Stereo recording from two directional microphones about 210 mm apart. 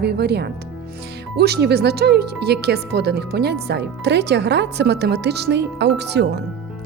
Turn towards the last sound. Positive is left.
turn(degrees=-55)  # may be behind; listen again after turning